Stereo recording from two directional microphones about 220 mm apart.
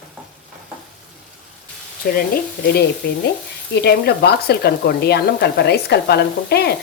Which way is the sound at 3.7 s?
45° left (ahead or behind).